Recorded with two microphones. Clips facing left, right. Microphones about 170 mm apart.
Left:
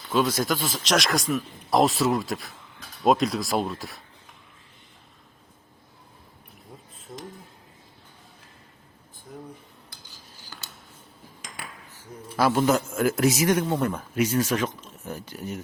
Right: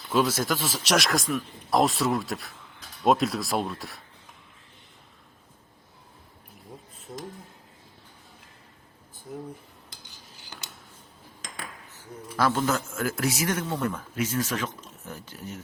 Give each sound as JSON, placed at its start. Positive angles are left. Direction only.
{"t": 0.1, "sound": "speech", "side_deg": -5}
{"t": 9.3, "sound": "speech", "side_deg": -5}
{"t": 10.4, "sound": "a sound", "side_deg": -20}
{"t": 12.4, "sound": "a man's voice", "side_deg": 15}